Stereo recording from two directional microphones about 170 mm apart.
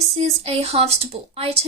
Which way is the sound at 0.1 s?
35° right (ahead or behind).